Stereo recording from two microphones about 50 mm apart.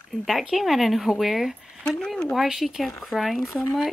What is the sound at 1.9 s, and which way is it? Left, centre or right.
Speech, centre.